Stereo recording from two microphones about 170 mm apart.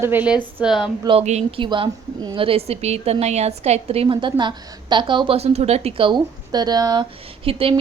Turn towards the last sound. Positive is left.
turn(degrees=-30)  # may be behind; listen again after turning